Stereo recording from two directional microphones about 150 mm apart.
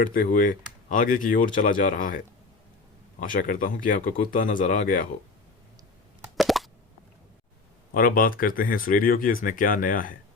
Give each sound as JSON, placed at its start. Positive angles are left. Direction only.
{"t": 0.1, "sound": "speech", "side_deg": 65}
{"t": 3.2, "sound": "speech", "side_deg": 65}
{"t": 6.3, "sound": "plop", "side_deg": 0}
{"t": 7.9, "sound": "speech", "side_deg": 70}